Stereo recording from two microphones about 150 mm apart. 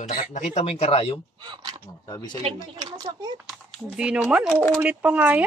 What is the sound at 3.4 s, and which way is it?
Speech, 5° right (ahead or behind).